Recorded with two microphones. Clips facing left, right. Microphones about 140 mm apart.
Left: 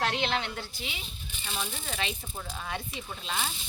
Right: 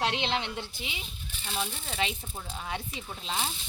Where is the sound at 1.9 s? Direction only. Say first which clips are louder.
Right 4 dB; 25° right (ahead or behind).